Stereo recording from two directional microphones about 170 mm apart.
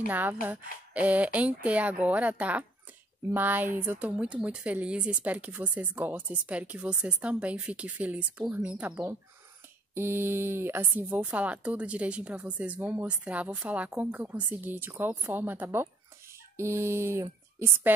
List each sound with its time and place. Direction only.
0.1 s speech: 10° right (ahead or behind)